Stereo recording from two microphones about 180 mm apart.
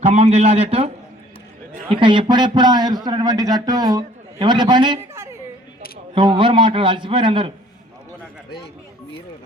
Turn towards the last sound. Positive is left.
turn(degrees=-30)  # may be behind; listen again after turning